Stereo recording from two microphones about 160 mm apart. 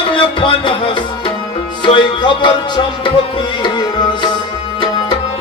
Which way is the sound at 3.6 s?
30° left (ahead or behind).